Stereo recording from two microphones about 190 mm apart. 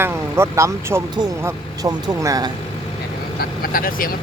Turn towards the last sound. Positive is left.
turn(degrees=50)  # may be behind; listen again after turning